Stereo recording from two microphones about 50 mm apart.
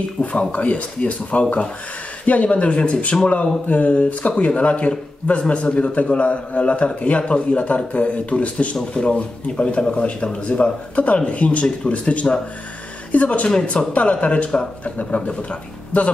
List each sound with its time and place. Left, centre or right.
0.2 s a man's voice: left